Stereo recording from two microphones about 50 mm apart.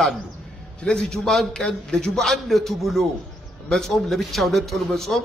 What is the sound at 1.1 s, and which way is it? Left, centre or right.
A man's voice, centre.